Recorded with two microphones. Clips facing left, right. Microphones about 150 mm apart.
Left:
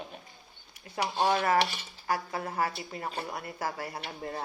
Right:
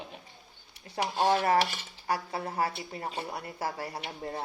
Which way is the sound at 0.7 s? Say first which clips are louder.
Even; 30° right (ahead or behind).